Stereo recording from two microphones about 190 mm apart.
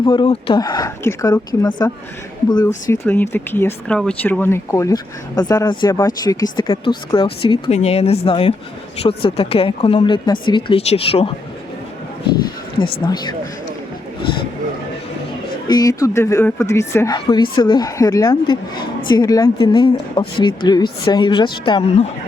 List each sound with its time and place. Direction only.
0.0 s speech: 20° left (ahead or behind)
15.6 s speech: 20° left (ahead or behind)